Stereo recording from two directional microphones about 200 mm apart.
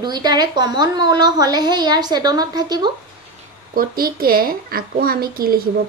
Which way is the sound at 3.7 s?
45° right (ahead or behind).